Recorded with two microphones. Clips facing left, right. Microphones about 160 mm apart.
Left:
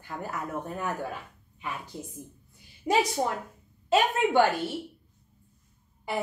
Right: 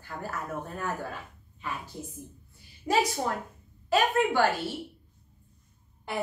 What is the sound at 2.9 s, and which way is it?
Speech, 25° left (ahead or behind).